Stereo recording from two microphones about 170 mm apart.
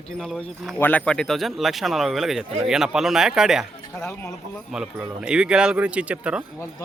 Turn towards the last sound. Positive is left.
turn(degrees=-5)  # may be behind; listen again after turning